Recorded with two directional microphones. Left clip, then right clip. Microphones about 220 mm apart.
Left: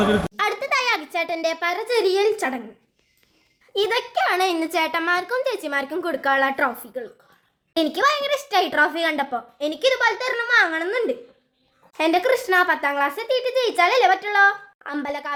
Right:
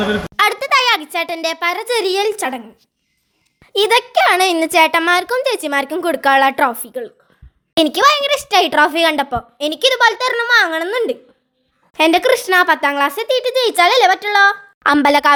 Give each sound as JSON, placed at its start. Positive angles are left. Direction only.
{"t": 0.3, "sound": "a child's voice", "side_deg": -40}
{"t": 3.7, "sound": "speech", "side_deg": -45}
{"t": 14.8, "sound": "a woman's voice", "side_deg": -45}